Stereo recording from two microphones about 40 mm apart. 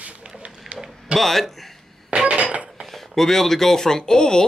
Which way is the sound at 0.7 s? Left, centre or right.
Centre.